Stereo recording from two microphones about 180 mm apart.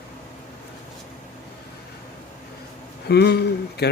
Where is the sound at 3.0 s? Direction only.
65° left (ahead or behind).